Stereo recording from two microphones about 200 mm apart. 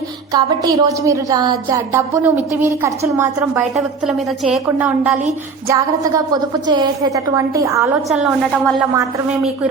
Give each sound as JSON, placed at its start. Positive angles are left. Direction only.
{"t": 0.3, "sound": "a woman's voice", "side_deg": -20}
{"t": 3.8, "sound": "a woman's voice", "side_deg": 0}
{"t": 8.1, "sound": "a woman's voice", "side_deg": 0}